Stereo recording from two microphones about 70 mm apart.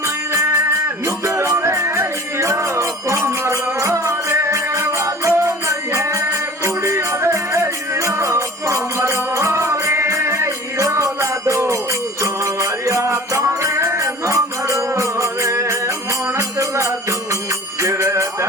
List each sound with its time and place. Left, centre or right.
0.3 s music: right